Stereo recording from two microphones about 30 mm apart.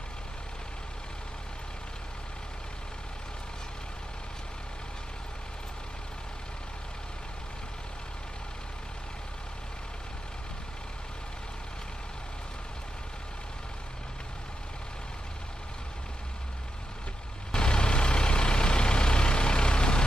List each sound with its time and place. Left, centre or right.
17.5 s vehicle: left